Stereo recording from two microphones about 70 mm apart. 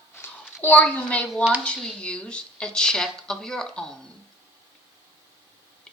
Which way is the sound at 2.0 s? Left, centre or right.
Centre.